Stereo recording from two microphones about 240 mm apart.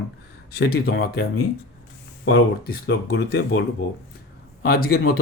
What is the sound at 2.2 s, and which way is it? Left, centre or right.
Speech, left.